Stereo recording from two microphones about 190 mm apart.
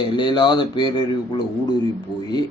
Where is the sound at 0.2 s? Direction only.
25° left (ahead or behind).